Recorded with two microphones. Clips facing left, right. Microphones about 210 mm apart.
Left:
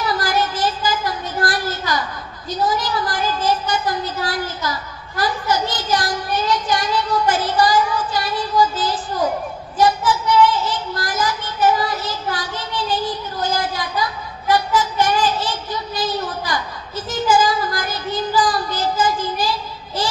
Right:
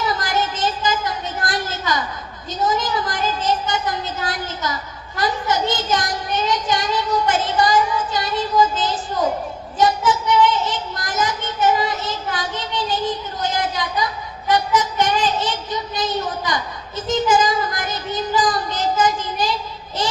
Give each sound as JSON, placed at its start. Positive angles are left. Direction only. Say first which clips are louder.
{"t": 0.0, "sound": "a sound", "louder": "left 1 dB", "side_deg": -20}
{"t": 2.5, "sound": "speech", "louder": "even", "side_deg": -20}
{"t": 9.8, "sound": "child singing", "louder": "left 1 dB", "side_deg": -20}
{"t": 14.5, "sound": "speech", "louder": "left 1 dB", "side_deg": -20}